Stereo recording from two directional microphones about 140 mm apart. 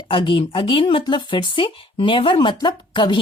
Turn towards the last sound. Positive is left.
turn(degrees=35)  # may be behind; listen again after turning